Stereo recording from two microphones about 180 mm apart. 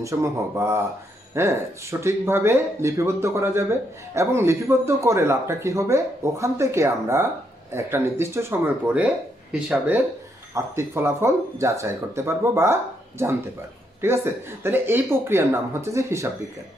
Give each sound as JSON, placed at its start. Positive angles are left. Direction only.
{"t": 0.0, "sound": "speech", "side_deg": -15}